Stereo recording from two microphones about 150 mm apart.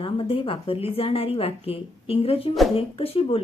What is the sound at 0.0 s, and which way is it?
A woman's voice, 40° left (ahead or behind).